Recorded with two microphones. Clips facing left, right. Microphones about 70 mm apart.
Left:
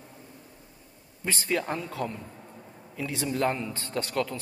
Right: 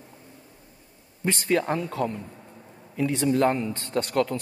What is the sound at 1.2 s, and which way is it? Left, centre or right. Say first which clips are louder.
A man's voice: right 5 dB; right.